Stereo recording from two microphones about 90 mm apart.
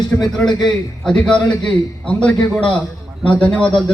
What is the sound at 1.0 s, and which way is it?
A man's voice, 10° left (ahead or behind).